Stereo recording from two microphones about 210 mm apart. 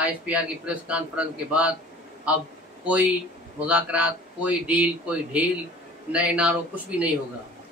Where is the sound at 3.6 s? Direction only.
5° right (ahead or behind).